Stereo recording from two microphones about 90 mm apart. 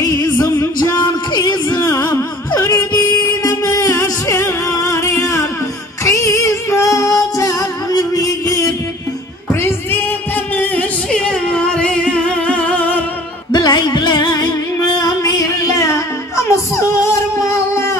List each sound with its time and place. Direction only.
0.0 s music: 45° left (ahead or behind)
8.1 s a sound: 40° left (ahead or behind); by 13.0 s 15° left (ahead or behind)
13.5 s music: 55° left (ahead or behind); by 17.9 s 30° left (ahead or behind)